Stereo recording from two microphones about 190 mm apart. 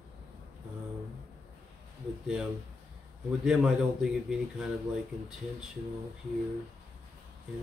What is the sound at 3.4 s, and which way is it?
A man's voice, 5° right (ahead or behind).